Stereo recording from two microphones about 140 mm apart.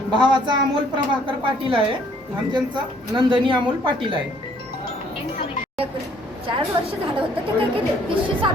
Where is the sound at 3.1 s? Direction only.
35° right (ahead or behind).